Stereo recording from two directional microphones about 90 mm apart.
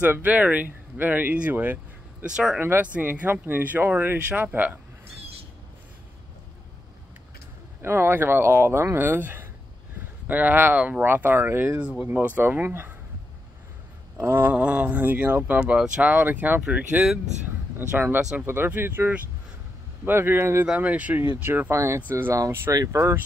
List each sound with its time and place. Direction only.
0.0 s speech: 20° right (ahead or behind)
2.2 s speech: 10° right (ahead or behind)
2.6 s speech: 20° right (ahead or behind)
7.8 s speech: 25° right (ahead or behind)
11.9 s speech: 10° right (ahead or behind)
12.2 s speech: 20° right (ahead or behind)
14.1 s speech: 25° right (ahead or behind)
17.7 s speech: 20° right (ahead or behind)
21.2 s speech: 25° right (ahead or behind)